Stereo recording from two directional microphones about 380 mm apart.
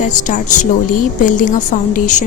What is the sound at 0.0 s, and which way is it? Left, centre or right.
A woman's voice, centre.